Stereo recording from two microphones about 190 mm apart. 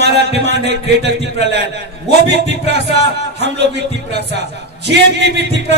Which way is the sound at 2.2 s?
65° right (ahead or behind).